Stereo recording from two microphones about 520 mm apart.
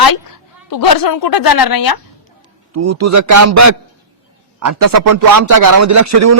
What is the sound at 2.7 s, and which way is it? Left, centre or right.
A man's voice, right.